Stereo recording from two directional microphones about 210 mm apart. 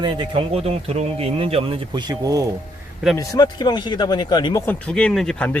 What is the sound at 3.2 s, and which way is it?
Speech, 15° left (ahead or behind).